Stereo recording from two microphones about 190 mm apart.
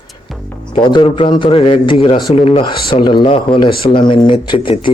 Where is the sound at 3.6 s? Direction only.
55° left (ahead or behind).